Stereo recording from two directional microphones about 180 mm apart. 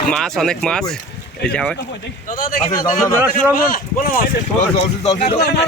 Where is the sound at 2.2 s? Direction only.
50° left (ahead or behind).